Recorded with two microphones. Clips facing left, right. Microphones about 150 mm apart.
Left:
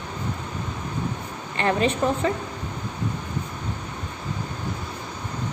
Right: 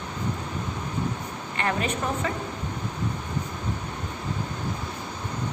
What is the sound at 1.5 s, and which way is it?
Speech, 30° left (ahead or behind).